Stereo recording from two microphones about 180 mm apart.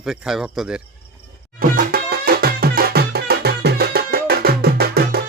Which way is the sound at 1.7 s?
55° right (ahead or behind).